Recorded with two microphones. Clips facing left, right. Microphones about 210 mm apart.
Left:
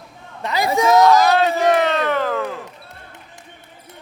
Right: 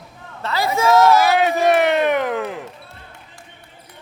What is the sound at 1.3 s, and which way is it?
Speech, 15° right (ahead or behind).